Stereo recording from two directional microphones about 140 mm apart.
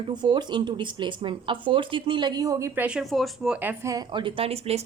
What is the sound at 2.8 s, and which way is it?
Speech, 5° right (ahead or behind).